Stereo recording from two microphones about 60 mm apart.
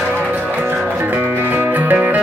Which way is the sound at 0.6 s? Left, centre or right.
Right.